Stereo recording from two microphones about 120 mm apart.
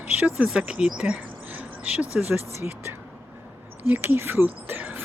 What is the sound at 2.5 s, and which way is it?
Speech, 20° right (ahead or behind).